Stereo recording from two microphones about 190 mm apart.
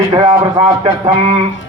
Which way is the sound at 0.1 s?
20° right (ahead or behind).